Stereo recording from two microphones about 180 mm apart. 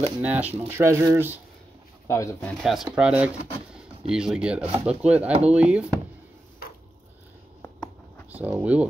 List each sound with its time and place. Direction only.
0.2 s speech: 10° right (ahead or behind)
2.0 s speech: 15° left (ahead or behind)
2.6 s speech: centre (ahead or behind)
7.8 s a sound: 10° right (ahead or behind)